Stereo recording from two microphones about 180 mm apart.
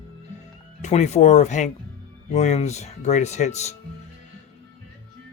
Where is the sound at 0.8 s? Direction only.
40° left (ahead or behind).